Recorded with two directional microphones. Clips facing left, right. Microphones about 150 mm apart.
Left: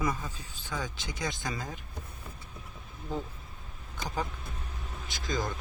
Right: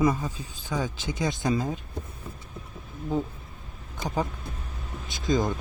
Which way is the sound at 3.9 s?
20° right (ahead or behind).